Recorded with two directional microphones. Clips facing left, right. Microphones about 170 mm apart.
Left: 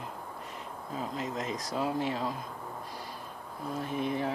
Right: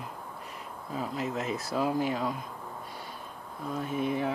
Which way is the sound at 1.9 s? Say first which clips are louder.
Right 2 dB; 30° left (ahead or behind).